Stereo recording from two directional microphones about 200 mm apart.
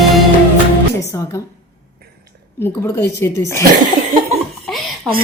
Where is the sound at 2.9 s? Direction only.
15° left (ahead or behind).